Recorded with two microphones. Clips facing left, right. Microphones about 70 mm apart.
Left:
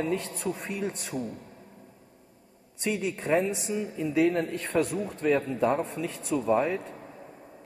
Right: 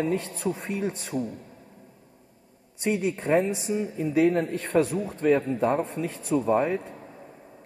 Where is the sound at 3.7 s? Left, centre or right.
Right.